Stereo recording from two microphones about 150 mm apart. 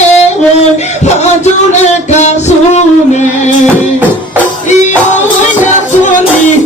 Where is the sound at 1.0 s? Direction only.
50° left (ahead or behind).